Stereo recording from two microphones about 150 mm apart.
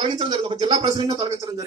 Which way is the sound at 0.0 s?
35° right (ahead or behind).